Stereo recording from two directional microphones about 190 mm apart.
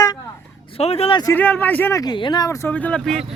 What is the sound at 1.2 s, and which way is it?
Speech, 10° left (ahead or behind).